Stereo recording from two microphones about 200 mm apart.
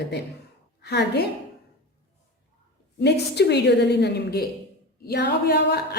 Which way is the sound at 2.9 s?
55° left (ahead or behind).